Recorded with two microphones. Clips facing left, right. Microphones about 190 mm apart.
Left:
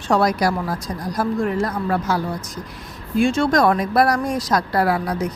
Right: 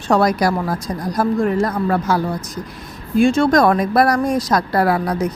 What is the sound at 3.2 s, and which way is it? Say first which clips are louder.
Speech: right 4 dB; 40° right (ahead or behind).